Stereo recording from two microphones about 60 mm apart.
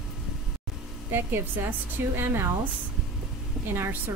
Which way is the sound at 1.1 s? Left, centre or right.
Right.